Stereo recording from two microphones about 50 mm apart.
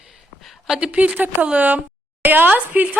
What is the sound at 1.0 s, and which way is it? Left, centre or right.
Speech, right.